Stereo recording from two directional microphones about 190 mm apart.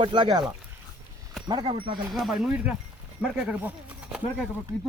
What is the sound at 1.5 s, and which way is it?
Speech, 25° right (ahead or behind).